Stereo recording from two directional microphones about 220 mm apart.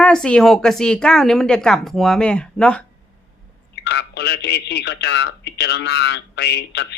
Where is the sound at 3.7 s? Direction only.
50° left (ahead or behind).